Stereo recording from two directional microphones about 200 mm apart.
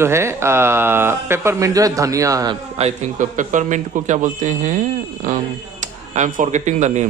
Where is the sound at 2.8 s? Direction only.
40° right (ahead or behind).